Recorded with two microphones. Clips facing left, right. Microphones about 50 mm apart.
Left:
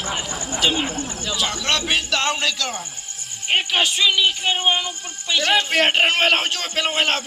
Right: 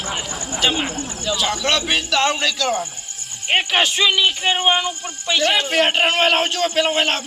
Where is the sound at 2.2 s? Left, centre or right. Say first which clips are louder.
Right 4 dB; centre.